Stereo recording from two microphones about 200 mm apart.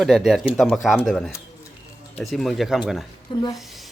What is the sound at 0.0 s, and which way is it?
Speech, centre (ahead or behind).